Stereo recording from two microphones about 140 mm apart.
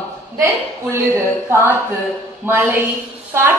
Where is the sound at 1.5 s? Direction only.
15° right (ahead or behind).